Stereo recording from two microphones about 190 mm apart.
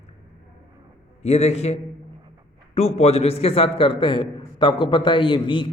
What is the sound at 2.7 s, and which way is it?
A man's voice, 35° left (ahead or behind).